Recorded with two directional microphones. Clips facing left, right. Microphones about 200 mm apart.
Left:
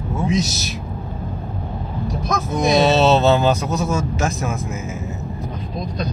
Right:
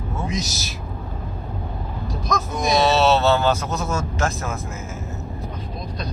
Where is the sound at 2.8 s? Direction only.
20° left (ahead or behind).